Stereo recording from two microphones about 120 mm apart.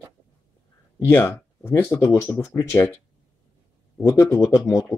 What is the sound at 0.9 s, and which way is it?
Speech, 20° left (ahead or behind).